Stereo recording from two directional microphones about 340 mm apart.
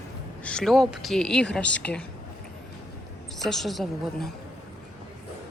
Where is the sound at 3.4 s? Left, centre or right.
Centre.